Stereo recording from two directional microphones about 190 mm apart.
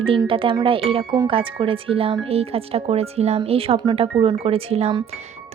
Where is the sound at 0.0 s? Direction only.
30° right (ahead or behind).